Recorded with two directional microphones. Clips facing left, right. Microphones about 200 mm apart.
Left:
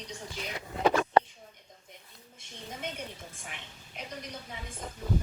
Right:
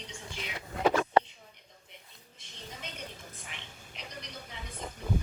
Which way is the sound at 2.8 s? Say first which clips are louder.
Left 6 dB; 55° left (ahead or behind).